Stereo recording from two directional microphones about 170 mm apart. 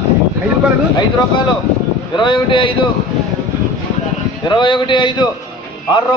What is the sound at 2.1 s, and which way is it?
Speech, 30° left (ahead or behind).